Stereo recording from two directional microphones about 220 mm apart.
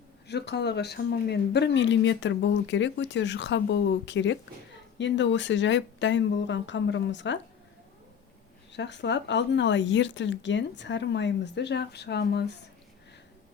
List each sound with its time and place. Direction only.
0.3 s speech: 50° left (ahead or behind)
8.7 s speech: 55° left (ahead or behind)